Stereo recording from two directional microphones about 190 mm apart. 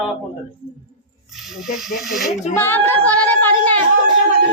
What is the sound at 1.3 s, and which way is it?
Speech, centre (ahead or behind).